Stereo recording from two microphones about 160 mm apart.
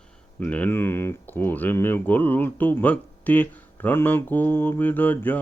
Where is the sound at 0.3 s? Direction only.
10° left (ahead or behind).